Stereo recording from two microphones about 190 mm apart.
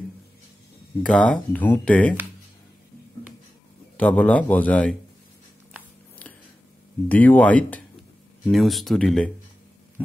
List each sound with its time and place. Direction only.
1.0 s speech: 5° left (ahead or behind)
3.9 s speech: 5° left (ahead or behind)
7.1 s speech: 10° left (ahead or behind)